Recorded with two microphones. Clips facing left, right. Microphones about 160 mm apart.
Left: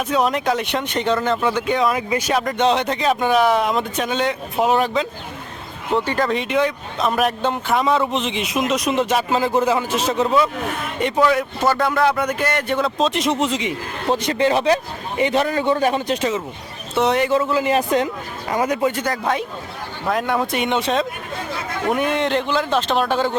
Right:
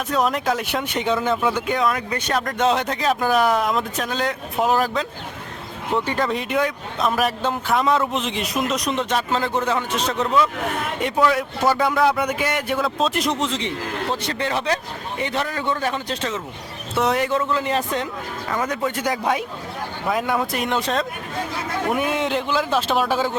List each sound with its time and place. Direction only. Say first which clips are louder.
0.1 s speech: left 1 dB; centre (ahead or behind)
6.1 s a man's voice: left 2 dB; centre (ahead or behind)
16.9 s a man's voice: left 3 dB; centre (ahead or behind)
19.0 s speech: even; 10° right (ahead or behind)